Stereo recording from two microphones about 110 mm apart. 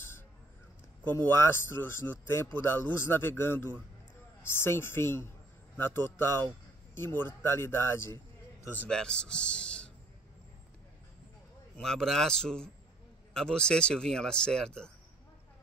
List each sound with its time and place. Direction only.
1.0 s speech: 20° left (ahead or behind)
8.7 s speech: 10° left (ahead or behind)
11.7 s a man's voice: 5° left (ahead or behind)